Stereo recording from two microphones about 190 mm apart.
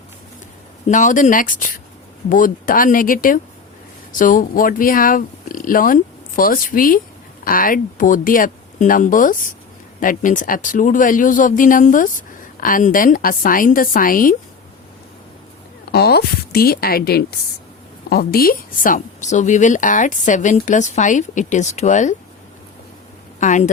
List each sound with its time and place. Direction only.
0.9 s speech: 40° left (ahead or behind)
15.9 s a woman's voice: 55° left (ahead or behind); by 22.1 s 40° left (ahead or behind)
23.4 s a woman's voice: 40° left (ahead or behind)